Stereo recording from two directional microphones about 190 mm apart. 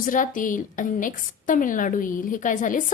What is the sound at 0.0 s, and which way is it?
A woman's voice, 45° left (ahead or behind).